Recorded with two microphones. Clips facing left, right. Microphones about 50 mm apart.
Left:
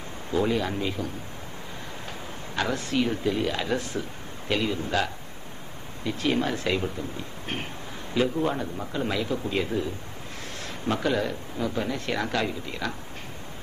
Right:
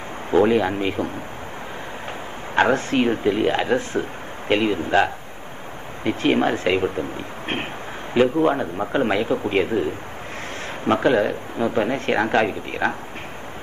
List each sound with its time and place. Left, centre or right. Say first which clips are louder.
0.3 s a man's voice: right 8 dB; right
2.5 s a man's voice: right 9 dB; right
10.9 s a man's voice: right 8 dB; right